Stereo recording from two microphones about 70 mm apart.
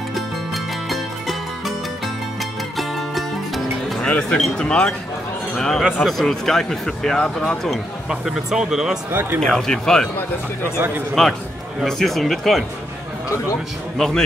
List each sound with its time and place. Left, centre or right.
0.8 s music: centre
2.8 s music: centre
4.0 s speech: centre
8.1 s speech: centre
9.1 s speech: right
9.4 s speech: centre
11.2 s speech: centre
13.9 s speech: centre